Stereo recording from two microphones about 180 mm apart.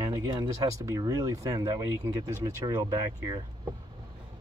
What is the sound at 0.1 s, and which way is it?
Speech, 20° right (ahead or behind).